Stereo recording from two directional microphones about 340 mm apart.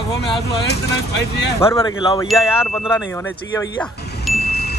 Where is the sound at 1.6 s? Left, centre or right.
Centre.